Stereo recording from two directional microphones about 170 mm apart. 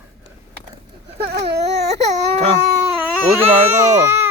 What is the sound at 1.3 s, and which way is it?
Baby cry, 75° right (ahead or behind).